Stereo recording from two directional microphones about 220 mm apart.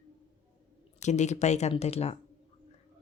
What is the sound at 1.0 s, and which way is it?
Speech, 30° left (ahead or behind).